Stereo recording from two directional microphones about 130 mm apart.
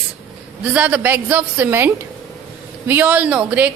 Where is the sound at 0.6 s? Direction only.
10° right (ahead or behind).